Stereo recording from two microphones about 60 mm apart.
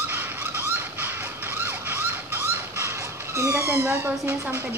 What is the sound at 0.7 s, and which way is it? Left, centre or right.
Emergency vehicle, right.